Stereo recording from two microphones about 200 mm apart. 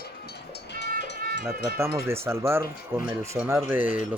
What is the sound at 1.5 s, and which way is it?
Speech, 10° right (ahead or behind).